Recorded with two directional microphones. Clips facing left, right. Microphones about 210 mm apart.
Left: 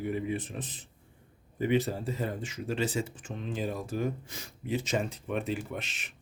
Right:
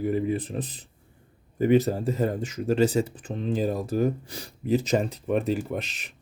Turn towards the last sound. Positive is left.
turn(degrees=-35)  # may be behind; listen again after turning